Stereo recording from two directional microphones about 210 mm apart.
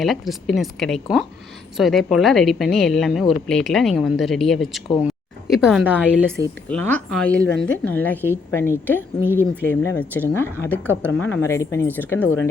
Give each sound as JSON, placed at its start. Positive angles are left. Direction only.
{"t": 0.0, "sound": "a woman's voice", "side_deg": 0}
{"t": 6.7, "sound": "speech", "side_deg": 10}
{"t": 7.4, "sound": "speech", "side_deg": 65}
{"t": 7.9, "sound": "speech", "side_deg": 10}